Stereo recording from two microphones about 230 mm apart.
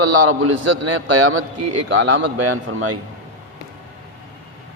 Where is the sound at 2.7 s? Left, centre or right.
Right.